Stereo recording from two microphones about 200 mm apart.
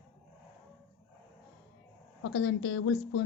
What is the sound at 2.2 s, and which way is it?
A woman's voice, 70° left (ahead or behind).